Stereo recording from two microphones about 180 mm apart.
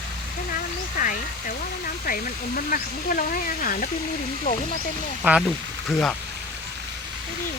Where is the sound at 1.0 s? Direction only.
45° left (ahead or behind).